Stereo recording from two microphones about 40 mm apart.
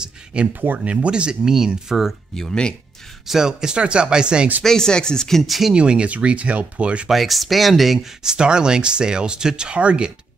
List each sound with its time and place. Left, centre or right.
0.0 s a sound: right
0.5 s speech: right
0.8 s speech: right
1.9 s speech: centre
2.3 s speech: centre
3.3 s speech: centre
4.6 s speech: centre
5.4 s speech: centre
5.8 s speech: right
7.1 s speech: centre
8.2 s speech: centre